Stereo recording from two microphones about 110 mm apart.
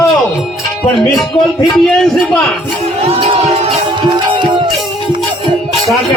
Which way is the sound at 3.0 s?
60° right (ahead or behind).